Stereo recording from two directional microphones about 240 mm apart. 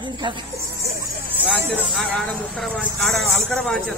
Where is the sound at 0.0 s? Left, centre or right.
Centre.